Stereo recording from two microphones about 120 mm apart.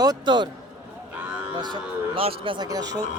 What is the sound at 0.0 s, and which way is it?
Speech, 35° right (ahead or behind).